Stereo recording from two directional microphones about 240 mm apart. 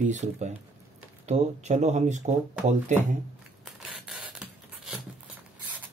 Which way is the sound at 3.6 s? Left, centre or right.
Centre.